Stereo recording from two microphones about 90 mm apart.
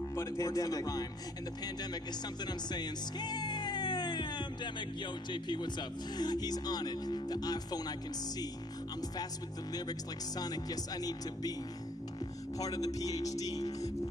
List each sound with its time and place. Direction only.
0.1 s a man's voice: 35° left (ahead or behind)
2.4 s speech: 50° left (ahead or behind)
9.8 s speech: 45° left (ahead or behind)
12.5 s a man's voice: 40° left (ahead or behind)